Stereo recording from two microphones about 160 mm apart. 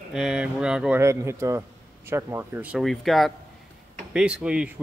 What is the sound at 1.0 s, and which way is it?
A man's voice, 20° right (ahead or behind).